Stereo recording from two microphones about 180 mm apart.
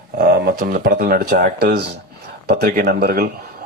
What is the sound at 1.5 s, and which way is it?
Speech, 65° right (ahead or behind).